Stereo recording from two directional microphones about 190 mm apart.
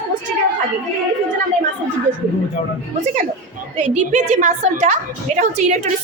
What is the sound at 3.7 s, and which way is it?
A woman's voice, 40° right (ahead or behind).